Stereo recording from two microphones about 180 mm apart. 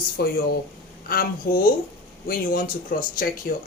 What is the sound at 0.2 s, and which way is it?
Speech, 60° left (ahead or behind).